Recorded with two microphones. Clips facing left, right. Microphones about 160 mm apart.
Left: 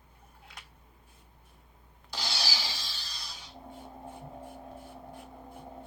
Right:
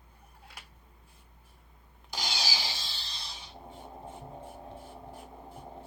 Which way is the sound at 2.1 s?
15° right (ahead or behind).